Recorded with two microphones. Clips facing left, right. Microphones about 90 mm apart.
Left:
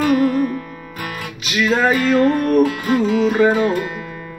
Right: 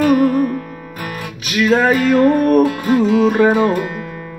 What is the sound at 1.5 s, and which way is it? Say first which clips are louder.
Music: right 3 dB; 60° right (ahead or behind).